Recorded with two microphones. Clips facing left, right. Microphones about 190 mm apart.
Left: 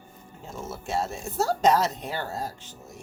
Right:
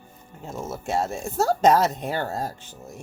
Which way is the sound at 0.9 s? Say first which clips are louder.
Right 3 dB; 45° right (ahead or behind).